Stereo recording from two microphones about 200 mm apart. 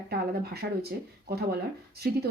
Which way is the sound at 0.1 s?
50° right (ahead or behind).